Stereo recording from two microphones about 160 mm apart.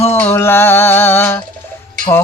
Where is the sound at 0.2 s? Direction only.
15° left (ahead or behind).